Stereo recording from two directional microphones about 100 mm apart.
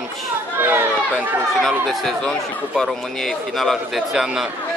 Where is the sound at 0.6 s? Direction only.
20° right (ahead or behind).